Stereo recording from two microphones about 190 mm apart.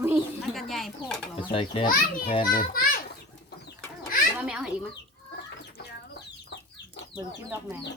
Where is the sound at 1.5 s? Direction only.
30° left (ahead or behind).